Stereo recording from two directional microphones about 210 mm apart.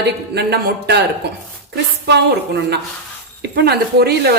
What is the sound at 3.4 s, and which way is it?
Speech, 50° right (ahead or behind).